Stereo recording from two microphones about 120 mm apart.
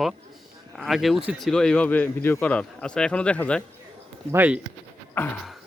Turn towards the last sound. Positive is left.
turn(degrees=15)  # may be behind; listen again after turning